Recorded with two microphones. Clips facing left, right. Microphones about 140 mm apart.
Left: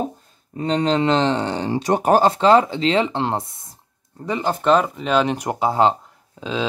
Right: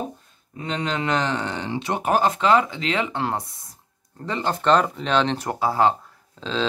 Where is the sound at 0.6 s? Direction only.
35° left (ahead or behind).